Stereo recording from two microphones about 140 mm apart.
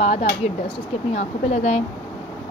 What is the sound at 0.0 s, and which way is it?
A woman's voice, 45° left (ahead or behind).